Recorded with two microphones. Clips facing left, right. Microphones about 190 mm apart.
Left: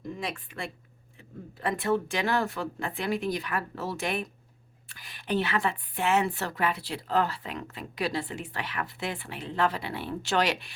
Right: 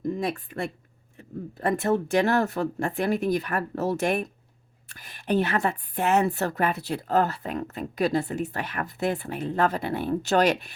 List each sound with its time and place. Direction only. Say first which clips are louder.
0.2 s a woman's voice: right 7 dB; 45° right (ahead or behind)